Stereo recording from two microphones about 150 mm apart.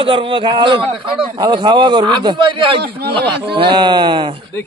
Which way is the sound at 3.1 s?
35° right (ahead or behind).